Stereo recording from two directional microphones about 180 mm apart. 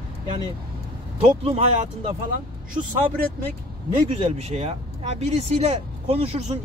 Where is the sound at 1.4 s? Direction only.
35° right (ahead or behind).